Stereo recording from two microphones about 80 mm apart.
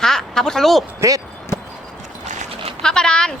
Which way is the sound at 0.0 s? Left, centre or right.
Centre.